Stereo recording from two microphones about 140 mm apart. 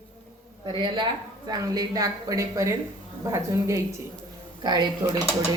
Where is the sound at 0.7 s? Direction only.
35° right (ahead or behind); by 3.8 s 20° right (ahead or behind).